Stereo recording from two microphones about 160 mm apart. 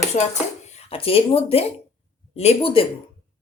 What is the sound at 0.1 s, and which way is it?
Speech, 50° left (ahead or behind).